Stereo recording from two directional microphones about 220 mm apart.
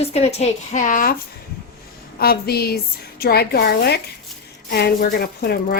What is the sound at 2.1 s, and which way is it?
A woman's voice, 45° left (ahead or behind).